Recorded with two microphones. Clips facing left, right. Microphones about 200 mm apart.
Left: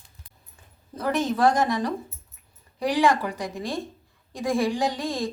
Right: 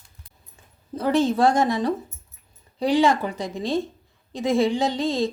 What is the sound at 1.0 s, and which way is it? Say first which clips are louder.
A woman's voice: right 3 dB; 30° right (ahead or behind).